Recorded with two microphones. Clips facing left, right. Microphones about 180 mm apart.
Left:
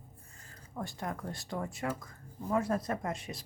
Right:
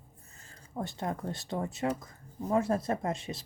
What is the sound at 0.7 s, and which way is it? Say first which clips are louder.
Speech: right 4 dB; 25° right (ahead or behind).